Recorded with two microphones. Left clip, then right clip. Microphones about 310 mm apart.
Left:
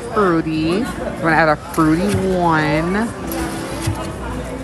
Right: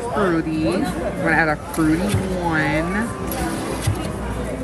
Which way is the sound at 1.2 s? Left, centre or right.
Right.